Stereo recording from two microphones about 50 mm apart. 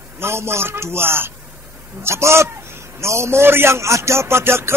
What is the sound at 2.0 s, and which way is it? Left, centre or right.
A man's voice, right.